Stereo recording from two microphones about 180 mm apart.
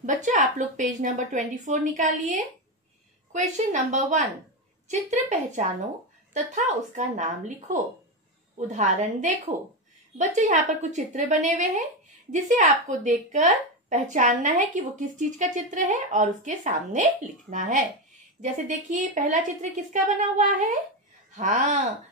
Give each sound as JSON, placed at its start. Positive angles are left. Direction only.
{"t": 0.0, "sound": "a woman's voice", "side_deg": -45}